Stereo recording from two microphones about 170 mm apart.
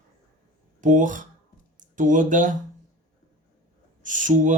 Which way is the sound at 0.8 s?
50° right (ahead or behind).